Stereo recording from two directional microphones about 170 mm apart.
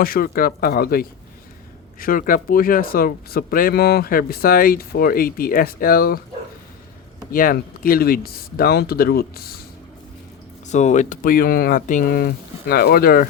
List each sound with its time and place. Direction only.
0.0 s speech: 60° left (ahead or behind)
7.3 s speech: 60° left (ahead or behind)
10.7 s speech: 45° left (ahead or behind); by 13.2 s 60° left (ahead or behind)